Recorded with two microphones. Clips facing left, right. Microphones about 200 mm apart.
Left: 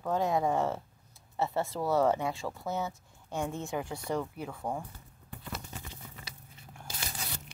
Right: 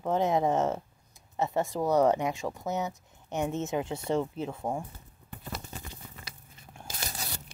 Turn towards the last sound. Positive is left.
turn(degrees=-40)  # may be behind; listen again after turning